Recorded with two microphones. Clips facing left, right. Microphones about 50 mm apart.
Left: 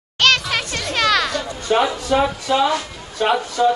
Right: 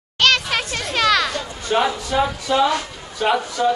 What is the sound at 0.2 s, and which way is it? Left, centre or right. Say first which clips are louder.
Music: left 1 dB; centre.